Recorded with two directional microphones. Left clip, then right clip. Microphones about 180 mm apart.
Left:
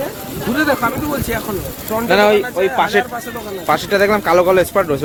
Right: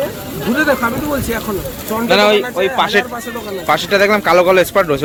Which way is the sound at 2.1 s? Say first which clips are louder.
Right 1 dB; 35° left (ahead or behind).